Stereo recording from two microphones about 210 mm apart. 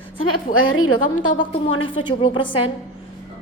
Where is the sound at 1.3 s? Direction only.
25° left (ahead or behind).